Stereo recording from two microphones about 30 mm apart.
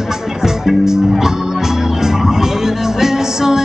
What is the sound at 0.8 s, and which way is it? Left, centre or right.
Speech, centre.